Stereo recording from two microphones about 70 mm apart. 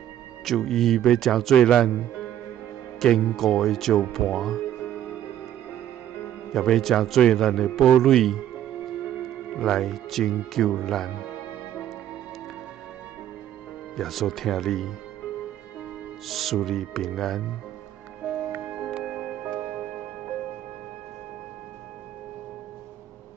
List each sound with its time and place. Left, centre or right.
0.5 s a man's voice: centre
3.0 s a man's voice: centre
6.5 s a man's voice: centre
9.6 s a man's voice: centre
13.9 s a man's voice: centre
16.3 s a man's voice: centre
18.2 s music: centre
18.9 s music: centre